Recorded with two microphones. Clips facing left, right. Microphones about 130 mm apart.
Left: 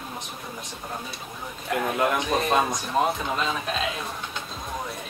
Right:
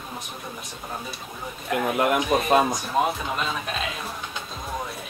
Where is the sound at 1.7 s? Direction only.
5° right (ahead or behind).